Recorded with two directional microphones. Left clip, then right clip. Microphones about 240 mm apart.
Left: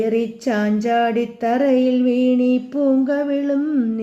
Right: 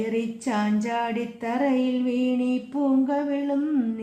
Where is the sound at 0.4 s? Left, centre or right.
Centre.